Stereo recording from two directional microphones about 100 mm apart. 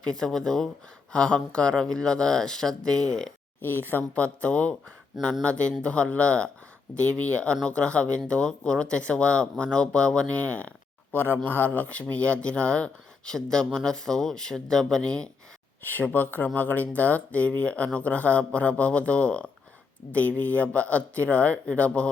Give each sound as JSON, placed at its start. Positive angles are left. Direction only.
{"t": 0.0, "sound": "speech", "side_deg": 5}
{"t": 3.6, "sound": "speech", "side_deg": 20}